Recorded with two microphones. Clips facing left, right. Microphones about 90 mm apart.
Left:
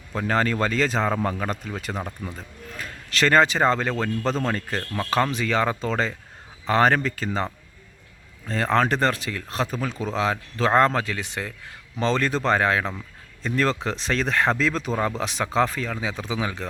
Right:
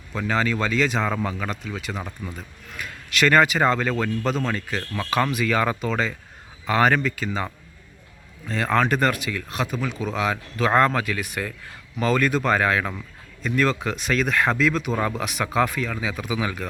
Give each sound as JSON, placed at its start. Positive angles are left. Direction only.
{"t": 0.1, "sound": "speech", "side_deg": 40}
{"t": 8.4, "sound": "speech", "side_deg": 35}